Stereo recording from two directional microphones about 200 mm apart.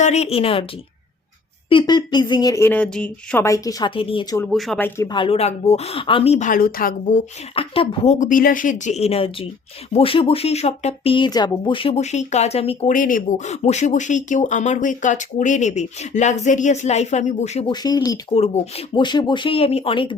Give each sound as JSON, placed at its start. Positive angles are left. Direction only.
{"t": 0.0, "sound": "speech", "side_deg": 35}
{"t": 1.7, "sound": "speech", "side_deg": 20}
{"t": 4.5, "sound": "speech", "side_deg": 0}
{"t": 5.1, "sound": "speech", "side_deg": 25}
{"t": 7.5, "sound": "speech", "side_deg": 25}
{"t": 17.7, "sound": "speech", "side_deg": 20}
{"t": 18.3, "sound": "speech", "side_deg": 30}